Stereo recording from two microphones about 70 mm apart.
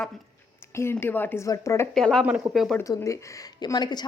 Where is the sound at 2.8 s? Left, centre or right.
Left.